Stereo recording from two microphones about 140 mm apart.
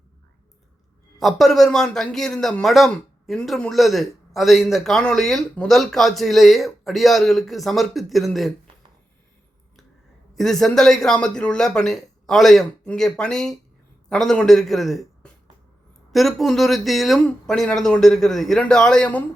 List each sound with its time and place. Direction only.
1.2 s a man's voice: centre (ahead or behind)
10.3 s a man's voice: centre (ahead or behind)